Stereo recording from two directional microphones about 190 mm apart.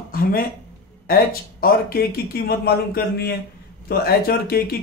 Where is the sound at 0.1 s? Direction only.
50° left (ahead or behind).